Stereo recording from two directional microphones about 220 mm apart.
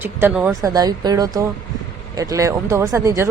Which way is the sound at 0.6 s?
15° right (ahead or behind).